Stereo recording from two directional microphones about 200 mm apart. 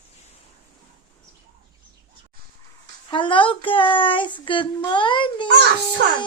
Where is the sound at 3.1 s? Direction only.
25° left (ahead or behind).